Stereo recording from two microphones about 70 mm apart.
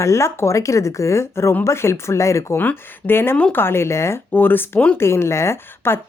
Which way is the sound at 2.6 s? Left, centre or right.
Left.